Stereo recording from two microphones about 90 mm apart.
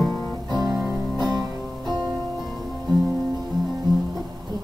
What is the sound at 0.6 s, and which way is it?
Music, centre (ahead or behind).